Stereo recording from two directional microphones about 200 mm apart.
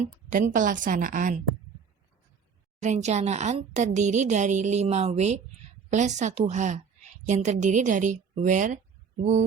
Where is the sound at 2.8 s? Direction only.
35° right (ahead or behind).